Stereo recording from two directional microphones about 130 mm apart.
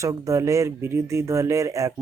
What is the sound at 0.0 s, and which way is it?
Speech, 25° right (ahead or behind).